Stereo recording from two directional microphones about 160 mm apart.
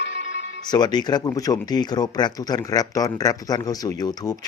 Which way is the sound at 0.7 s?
25° left (ahead or behind).